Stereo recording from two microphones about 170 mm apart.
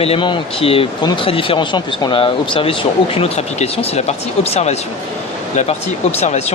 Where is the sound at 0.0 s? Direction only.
30° left (ahead or behind).